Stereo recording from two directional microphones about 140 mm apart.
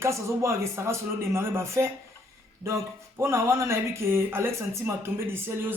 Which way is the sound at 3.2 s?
20° right (ahead or behind).